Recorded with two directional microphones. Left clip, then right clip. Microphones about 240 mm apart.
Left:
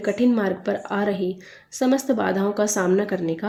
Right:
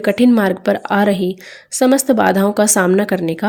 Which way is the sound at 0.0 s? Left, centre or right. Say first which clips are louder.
Right 8 dB; right.